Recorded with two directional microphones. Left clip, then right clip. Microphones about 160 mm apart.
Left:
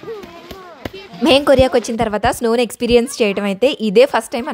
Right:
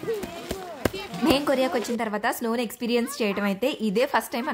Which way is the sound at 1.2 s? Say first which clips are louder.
Left 11 dB; 50° left (ahead or behind).